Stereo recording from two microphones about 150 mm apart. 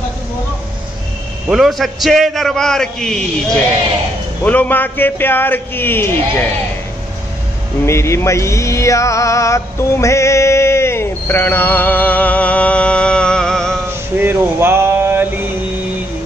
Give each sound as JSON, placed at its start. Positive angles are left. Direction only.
{"t": 1.5, "sound": "a man's voice", "side_deg": 0}
{"t": 7.8, "sound": "music", "side_deg": 20}
{"t": 14.2, "sound": "a sound", "side_deg": -15}